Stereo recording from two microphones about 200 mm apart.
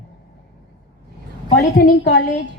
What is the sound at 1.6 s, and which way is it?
Speech, 50° left (ahead or behind).